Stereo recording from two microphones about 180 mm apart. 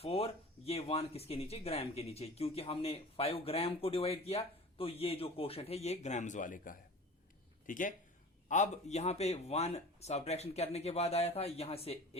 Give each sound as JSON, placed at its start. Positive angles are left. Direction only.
{"t": 0.0, "sound": "speech", "side_deg": 35}